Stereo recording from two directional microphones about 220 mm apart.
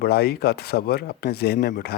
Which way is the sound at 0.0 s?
45° left (ahead or behind).